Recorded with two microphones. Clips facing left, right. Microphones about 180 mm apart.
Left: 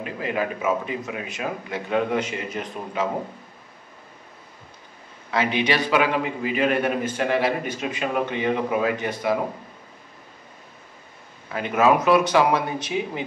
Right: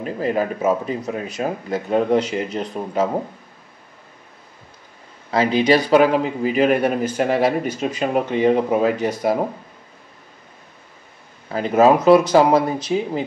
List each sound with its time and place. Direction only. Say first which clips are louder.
0.0 s speech: right 5 dB; 40° right (ahead or behind)
5.3 s speech: right 7 dB; 35° right (ahead or behind)
11.4 s speech: right 5 dB; 35° right (ahead or behind)